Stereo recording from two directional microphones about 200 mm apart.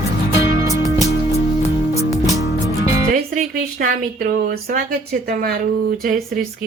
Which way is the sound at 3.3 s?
45° right (ahead or behind).